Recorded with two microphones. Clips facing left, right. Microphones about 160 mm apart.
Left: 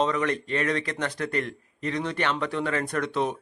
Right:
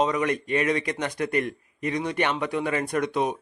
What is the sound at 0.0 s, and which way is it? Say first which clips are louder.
A man's voice: right 1 dB; 15° right (ahead or behind).